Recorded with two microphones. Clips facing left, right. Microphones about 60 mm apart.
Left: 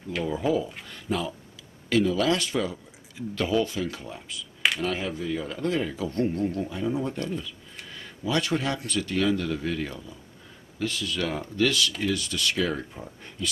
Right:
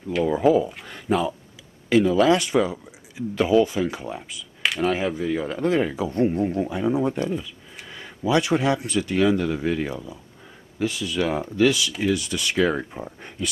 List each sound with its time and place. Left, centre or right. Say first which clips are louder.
0.3 s speech: right 7 dB; right
1.9 s speech: right 6 dB; centre
5.2 s speech: right 5 dB; right